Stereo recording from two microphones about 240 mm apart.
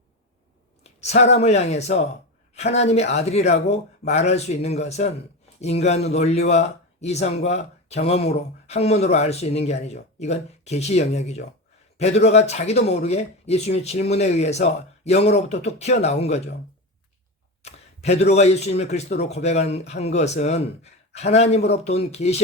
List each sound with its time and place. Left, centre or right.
0.9 s speech: left
17.6 s speech: left